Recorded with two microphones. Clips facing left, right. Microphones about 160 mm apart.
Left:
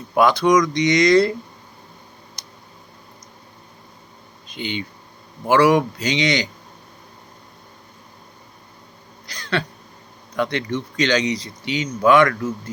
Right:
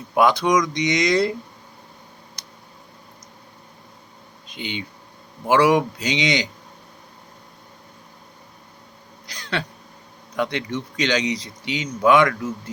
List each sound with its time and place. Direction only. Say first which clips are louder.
0.1 s speech: left 2 dB; 15° right (ahead or behind)
4.5 s speech: left 3 dB; 15° right (ahead or behind)
9.2 s a sound: left 3 dB; 20° right (ahead or behind)
10.3 s speech: left 2 dB; 15° right (ahead or behind)